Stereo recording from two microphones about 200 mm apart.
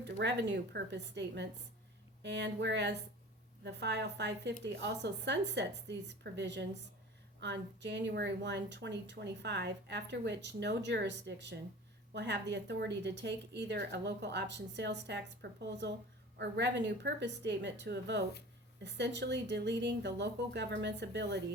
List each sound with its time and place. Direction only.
0.0 s a woman's voice: 60° right (ahead or behind)